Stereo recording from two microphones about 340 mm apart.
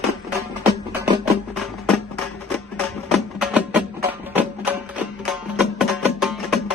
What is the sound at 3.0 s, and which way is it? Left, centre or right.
Music, centre.